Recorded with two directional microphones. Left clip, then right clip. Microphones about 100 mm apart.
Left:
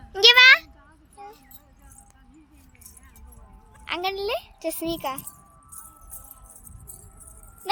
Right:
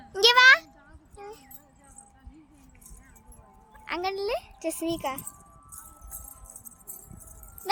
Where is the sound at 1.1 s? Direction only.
20° right (ahead or behind).